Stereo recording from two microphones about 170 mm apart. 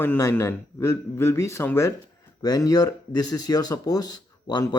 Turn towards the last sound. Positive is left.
turn(degrees=25)  # may be behind; listen again after turning